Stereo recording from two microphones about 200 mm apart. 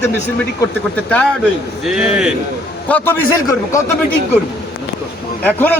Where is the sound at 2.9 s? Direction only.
10° left (ahead or behind).